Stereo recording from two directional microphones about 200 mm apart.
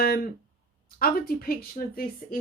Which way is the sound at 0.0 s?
50° left (ahead or behind).